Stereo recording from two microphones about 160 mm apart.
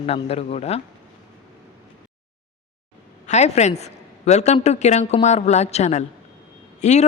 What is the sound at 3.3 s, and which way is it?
A woman's voice, 45° left (ahead or behind).